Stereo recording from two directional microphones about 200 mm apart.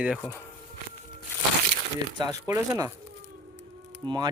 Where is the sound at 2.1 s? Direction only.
20° right (ahead or behind).